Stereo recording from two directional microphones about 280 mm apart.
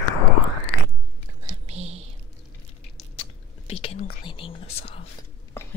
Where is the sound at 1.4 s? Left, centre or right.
Right.